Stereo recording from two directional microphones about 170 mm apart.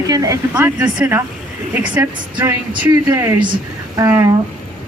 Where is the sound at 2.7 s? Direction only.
25° right (ahead or behind).